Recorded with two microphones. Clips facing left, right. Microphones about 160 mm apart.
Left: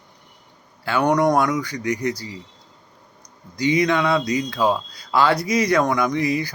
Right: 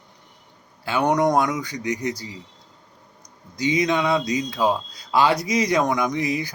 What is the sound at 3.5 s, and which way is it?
Speech, 20° right (ahead or behind).